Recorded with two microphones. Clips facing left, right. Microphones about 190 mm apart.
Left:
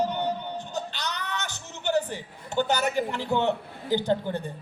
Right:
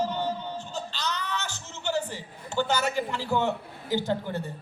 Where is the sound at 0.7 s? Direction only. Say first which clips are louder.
Right 1 dB; 15° left (ahead or behind).